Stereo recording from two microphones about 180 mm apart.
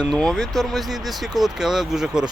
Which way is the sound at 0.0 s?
Centre (ahead or behind).